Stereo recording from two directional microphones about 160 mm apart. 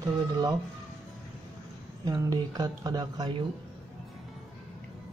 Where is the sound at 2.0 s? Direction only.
25° right (ahead or behind).